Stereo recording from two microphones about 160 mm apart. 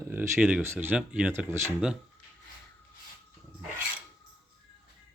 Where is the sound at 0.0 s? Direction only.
15° right (ahead or behind).